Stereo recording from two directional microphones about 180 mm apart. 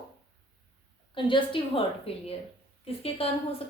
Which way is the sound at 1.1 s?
30° left (ahead or behind).